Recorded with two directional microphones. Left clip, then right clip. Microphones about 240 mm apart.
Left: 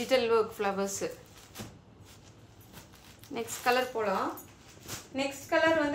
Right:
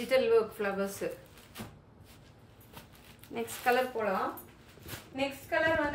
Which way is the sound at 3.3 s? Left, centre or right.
Centre.